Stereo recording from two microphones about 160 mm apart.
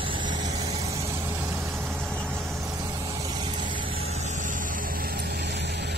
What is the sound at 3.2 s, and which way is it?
Vehicle, 25° right (ahead or behind).